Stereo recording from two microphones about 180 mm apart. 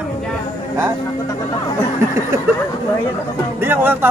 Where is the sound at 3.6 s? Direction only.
10° right (ahead or behind).